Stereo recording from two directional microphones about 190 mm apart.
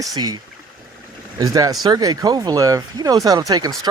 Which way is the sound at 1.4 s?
20° right (ahead or behind).